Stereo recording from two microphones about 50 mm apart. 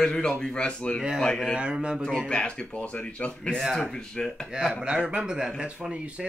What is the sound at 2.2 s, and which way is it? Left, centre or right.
Speech, left.